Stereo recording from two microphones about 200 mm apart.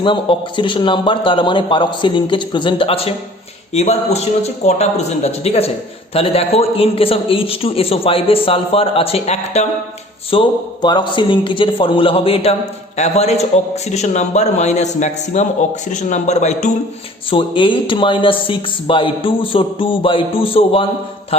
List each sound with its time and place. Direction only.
0.0 s a man's voice: 25° left (ahead or behind)
10.3 s a man's voice: 20° left (ahead or behind)
17.3 s a man's voice: 25° left (ahead or behind)